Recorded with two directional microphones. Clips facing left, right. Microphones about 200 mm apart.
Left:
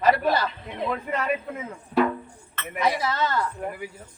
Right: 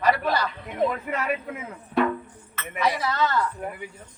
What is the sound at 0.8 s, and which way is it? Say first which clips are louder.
Speech: right 4 dB; 45° right (ahead or behind).